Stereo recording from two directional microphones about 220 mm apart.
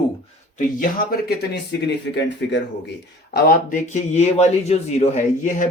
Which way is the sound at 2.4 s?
50° left (ahead or behind).